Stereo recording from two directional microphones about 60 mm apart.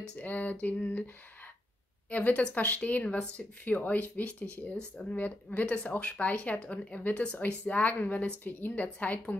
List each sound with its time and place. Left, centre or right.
0.1 s speech: left